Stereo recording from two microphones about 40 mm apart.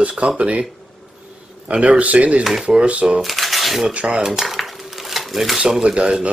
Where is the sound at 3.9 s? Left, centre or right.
Right.